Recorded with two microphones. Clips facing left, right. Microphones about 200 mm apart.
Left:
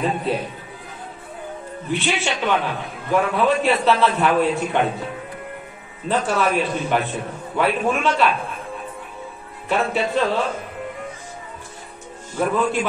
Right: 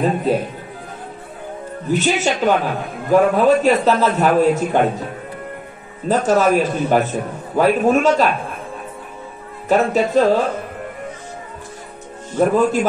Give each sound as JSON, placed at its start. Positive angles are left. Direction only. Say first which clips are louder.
{"t": 0.0, "sound": "speech", "louder": "right 5 dB", "side_deg": -40}
{"t": 1.9, "sound": "a man's voice", "louder": "right 6 dB", "side_deg": -40}
{"t": 6.0, "sound": "a man's voice", "louder": "right 6 dB", "side_deg": -40}
{"t": 9.7, "sound": "a man's voice", "louder": "right 6 dB", "side_deg": -40}
{"t": 12.4, "sound": "a man's voice", "louder": "right 6 dB", "side_deg": -40}